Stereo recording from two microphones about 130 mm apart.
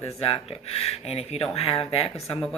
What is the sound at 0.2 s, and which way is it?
Speech, 55° left (ahead or behind).